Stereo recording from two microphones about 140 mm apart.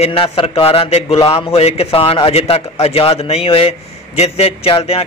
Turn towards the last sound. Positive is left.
turn(degrees=45)  # may be behind; listen again after turning